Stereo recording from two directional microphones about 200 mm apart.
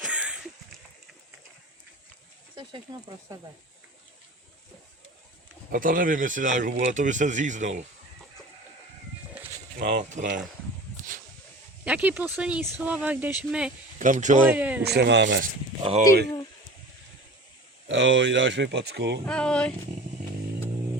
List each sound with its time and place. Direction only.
0.0 s a sound: 5° right (ahead or behind)
2.9 s speech: 20° right (ahead or behind)
5.7 s speech: 45° right (ahead or behind)
9.3 s a sound: 10° right (ahead or behind)
9.7 s speech: 55° right (ahead or behind)
10.0 s speech: 35° right (ahead or behind)
11.9 s speech: 5° right (ahead or behind)
14.0 s speech: 40° right (ahead or behind)
14.4 s speech: 10° right (ahead or behind)
14.8 s speech: 60° right (ahead or behind)
17.8 s speech: 65° right (ahead or behind)
19.2 s speech: 5° left (ahead or behind)